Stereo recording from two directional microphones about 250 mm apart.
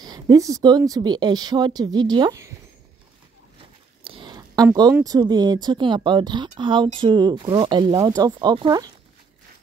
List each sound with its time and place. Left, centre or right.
0.0 s speech: centre
4.0 s a sound: centre
4.6 s speech: centre